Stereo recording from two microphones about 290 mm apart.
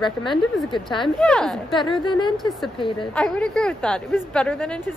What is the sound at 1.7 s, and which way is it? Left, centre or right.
Speech, centre.